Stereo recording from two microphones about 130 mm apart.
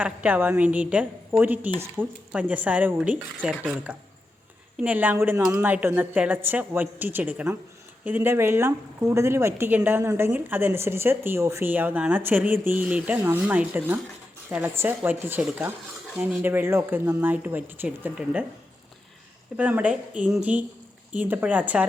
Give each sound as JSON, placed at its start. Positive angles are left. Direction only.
{"t": 0.0, "sound": "speech", "side_deg": -10}
{"t": 4.8, "sound": "speech", "side_deg": -10}
{"t": 19.5, "sound": "speech", "side_deg": -10}